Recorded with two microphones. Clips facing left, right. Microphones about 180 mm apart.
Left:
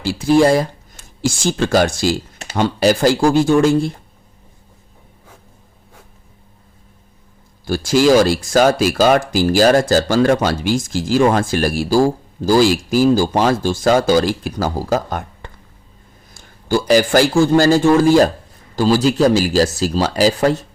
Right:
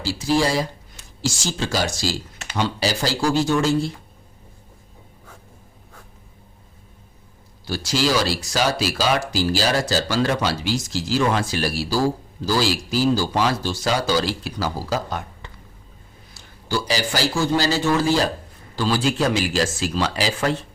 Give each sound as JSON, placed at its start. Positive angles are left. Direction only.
{"t": 0.0, "sound": "speech", "side_deg": 55}
{"t": 2.4, "sound": "speech", "side_deg": 45}
{"t": 7.7, "sound": "a man's voice", "side_deg": 50}